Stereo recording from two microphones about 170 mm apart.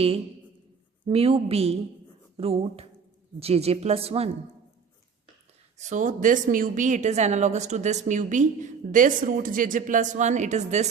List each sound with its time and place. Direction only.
1.0 s a woman's voice: 35° right (ahead or behind)
5.7 s a woman's voice: 45° right (ahead or behind)